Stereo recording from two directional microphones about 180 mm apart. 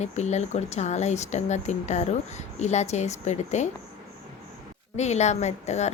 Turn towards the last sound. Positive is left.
turn(degrees=40)  # may be behind; listen again after turning